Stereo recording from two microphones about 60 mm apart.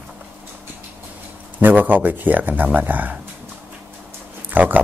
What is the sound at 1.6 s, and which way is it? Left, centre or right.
Speech, right.